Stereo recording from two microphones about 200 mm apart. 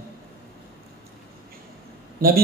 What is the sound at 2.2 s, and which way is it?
Speech, 50° right (ahead or behind).